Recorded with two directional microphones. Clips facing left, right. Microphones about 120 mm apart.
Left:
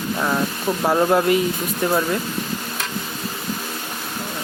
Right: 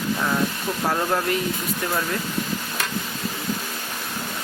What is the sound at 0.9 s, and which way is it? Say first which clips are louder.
Speech: left 7 dB; 15° left (ahead or behind).